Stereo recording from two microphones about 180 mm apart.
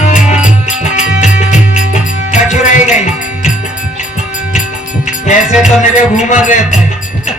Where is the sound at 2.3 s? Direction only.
45° left (ahead or behind).